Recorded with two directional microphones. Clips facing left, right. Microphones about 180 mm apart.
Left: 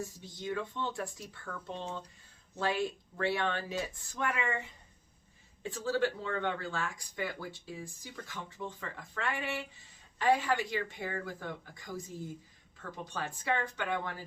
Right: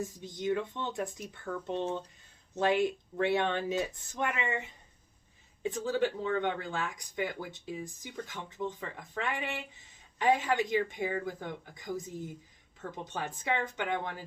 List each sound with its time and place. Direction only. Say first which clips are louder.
0.0 s speech: right 5 dB; 20° right (ahead or behind)